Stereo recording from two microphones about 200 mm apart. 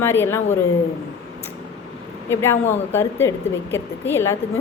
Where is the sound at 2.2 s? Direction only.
10° left (ahead or behind).